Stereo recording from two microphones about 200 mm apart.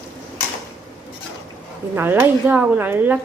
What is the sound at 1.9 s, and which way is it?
Speech, 10° right (ahead or behind).